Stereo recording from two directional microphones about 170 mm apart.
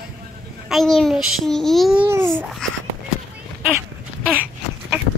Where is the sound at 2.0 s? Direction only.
15° right (ahead or behind).